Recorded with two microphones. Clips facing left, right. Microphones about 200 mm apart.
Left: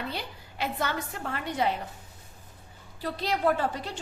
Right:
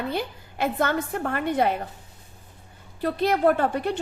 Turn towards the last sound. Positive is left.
turn(degrees=-60)  # may be behind; listen again after turning